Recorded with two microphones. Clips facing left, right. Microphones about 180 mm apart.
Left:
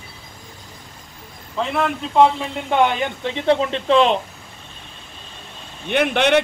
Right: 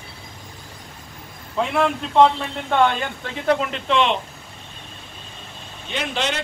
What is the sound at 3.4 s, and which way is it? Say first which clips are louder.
Speech: left 3 dB; 30° left (ahead or behind).